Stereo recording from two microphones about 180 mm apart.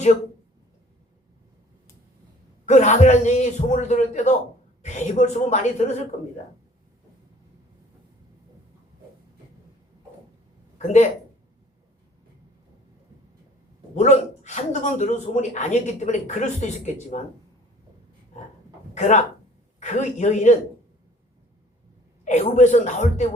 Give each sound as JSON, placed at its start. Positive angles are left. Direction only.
{"t": 2.6, "sound": "speech", "side_deg": 40}
{"t": 10.8, "sound": "speech", "side_deg": 40}
{"t": 13.9, "sound": "speech", "side_deg": 40}
{"t": 18.9, "sound": "speech", "side_deg": 40}
{"t": 22.2, "sound": "speech", "side_deg": 40}